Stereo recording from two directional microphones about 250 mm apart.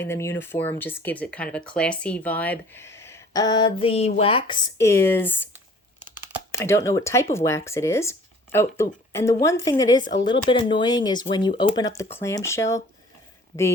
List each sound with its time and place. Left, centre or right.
0.0 s speech: centre
5.5 s computer keyboard: centre
6.5 s speech: centre